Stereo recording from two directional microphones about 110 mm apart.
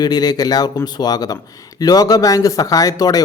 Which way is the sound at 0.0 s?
35° left (ahead or behind).